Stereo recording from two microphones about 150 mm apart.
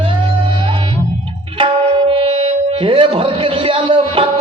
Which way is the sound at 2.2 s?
35° right (ahead or behind).